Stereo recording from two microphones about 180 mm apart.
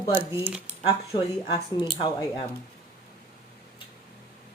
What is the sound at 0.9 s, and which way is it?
Speech, 25° left (ahead or behind).